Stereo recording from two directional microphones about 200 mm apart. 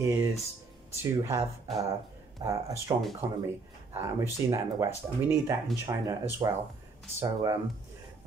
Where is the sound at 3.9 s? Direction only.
15° right (ahead or behind).